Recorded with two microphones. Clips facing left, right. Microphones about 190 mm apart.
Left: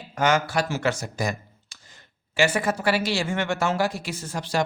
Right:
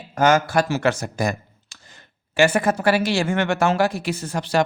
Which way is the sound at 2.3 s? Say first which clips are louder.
Right 5 dB; 55° right (ahead or behind).